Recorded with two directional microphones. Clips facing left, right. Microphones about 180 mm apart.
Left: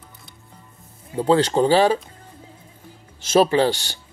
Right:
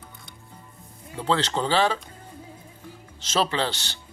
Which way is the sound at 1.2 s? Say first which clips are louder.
Left 8 dB; 10° left (ahead or behind).